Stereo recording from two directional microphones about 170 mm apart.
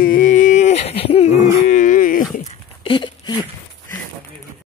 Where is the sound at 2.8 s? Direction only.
30° left (ahead or behind).